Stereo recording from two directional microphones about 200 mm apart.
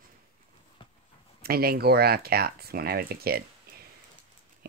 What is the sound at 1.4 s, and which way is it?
Speech, 50° right (ahead or behind).